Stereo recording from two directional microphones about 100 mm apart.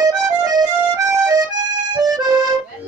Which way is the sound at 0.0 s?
40° right (ahead or behind).